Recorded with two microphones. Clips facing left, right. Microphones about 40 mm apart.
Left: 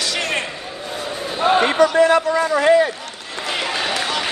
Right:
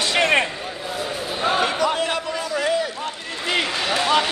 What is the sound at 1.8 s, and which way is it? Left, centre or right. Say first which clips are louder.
A man's voice: left 8 dB; left.